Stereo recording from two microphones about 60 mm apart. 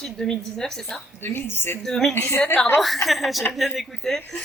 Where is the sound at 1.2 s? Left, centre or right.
Left.